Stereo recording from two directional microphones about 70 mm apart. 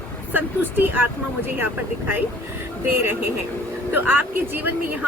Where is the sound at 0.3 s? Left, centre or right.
Right.